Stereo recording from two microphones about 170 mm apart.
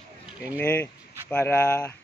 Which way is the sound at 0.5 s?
10° left (ahead or behind).